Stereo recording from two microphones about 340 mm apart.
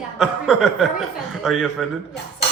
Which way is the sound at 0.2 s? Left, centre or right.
Centre.